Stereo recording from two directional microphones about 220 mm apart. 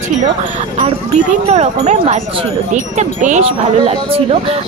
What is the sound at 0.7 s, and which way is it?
Speech, 25° right (ahead or behind).